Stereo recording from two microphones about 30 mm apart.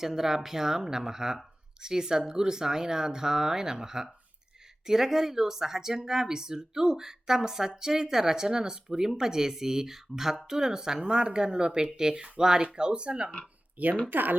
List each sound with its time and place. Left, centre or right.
0.0 s speech: centre; by 13.3 s right
14.1 s speech: right